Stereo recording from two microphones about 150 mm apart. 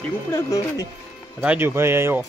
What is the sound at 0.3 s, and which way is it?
Speech, 25° left (ahead or behind).